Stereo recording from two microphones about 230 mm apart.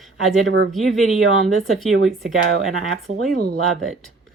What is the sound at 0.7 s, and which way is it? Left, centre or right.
Speech, centre.